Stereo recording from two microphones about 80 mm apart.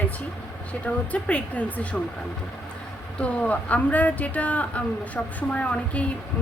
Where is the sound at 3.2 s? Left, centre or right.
Centre.